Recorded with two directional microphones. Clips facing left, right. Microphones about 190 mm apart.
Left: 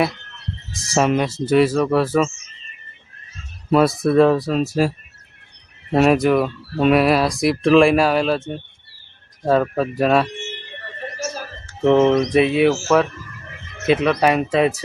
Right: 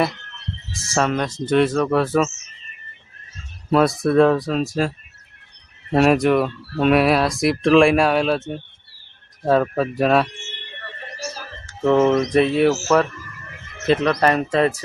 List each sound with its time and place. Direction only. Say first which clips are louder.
0.9 s speech: left 3 dB; 10° left (ahead or behind)
3.7 s speech: left 1 dB; centre (ahead or behind)
5.9 s speech: left 1 dB; centre (ahead or behind)
11.8 s speech: left 2 dB; 10° left (ahead or behind)
12.0 s speech: left 1 dB; centre (ahead or behind)
13.8 s speech: left 1 dB; 5° left (ahead or behind)